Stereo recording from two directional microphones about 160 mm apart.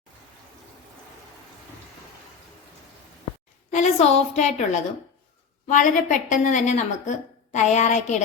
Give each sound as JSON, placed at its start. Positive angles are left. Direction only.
{"t": 3.7, "sound": "a woman's voice", "side_deg": 45}